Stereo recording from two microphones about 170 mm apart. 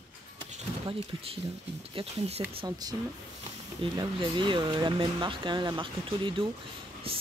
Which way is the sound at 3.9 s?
30° right (ahead or behind).